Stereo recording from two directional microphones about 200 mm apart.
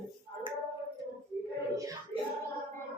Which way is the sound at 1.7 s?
15° right (ahead or behind).